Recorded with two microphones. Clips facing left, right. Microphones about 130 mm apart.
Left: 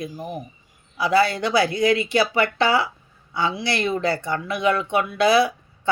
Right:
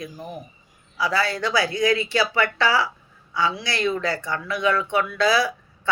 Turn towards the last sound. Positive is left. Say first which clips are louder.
# left 4 dB
turn(degrees=20)  # may be behind; listen again after turning